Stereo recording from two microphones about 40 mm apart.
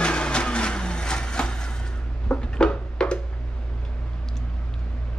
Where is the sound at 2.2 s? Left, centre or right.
Left.